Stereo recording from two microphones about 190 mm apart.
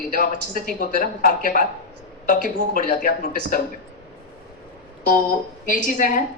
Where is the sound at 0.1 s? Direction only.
45° left (ahead or behind).